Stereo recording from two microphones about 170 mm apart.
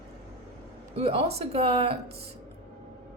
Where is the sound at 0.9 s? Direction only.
35° right (ahead or behind).